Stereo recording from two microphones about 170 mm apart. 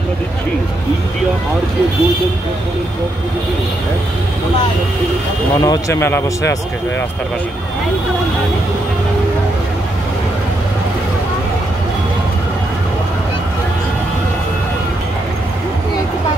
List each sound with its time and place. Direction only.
5.6 s speech: 20° left (ahead or behind)